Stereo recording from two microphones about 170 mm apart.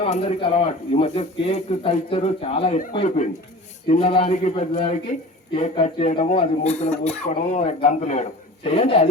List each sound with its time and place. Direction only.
0.0 s a man's voice: 40° left (ahead or behind)